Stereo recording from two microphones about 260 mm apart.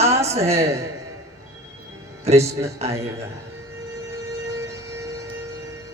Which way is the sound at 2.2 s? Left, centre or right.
Right.